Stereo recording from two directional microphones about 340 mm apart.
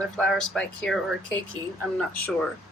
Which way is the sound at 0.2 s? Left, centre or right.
Centre.